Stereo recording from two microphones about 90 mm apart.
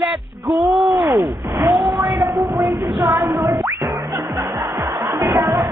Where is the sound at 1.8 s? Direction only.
50° right (ahead or behind).